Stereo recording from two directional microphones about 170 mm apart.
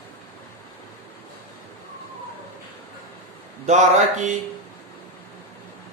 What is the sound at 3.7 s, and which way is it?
Speech, 45° right (ahead or behind).